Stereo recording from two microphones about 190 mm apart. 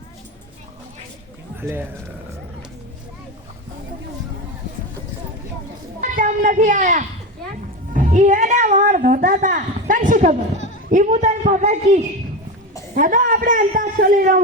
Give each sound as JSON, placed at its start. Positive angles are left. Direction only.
{"t": 1.6, "sound": "speech", "side_deg": -10}
{"t": 6.0, "sound": "a sound", "side_deg": -45}
{"t": 10.8, "sound": "a woman's voice", "side_deg": -40}